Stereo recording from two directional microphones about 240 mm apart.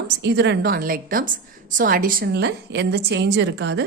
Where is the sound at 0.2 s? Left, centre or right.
Right.